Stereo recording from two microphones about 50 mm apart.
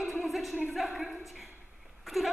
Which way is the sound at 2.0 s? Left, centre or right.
Centre.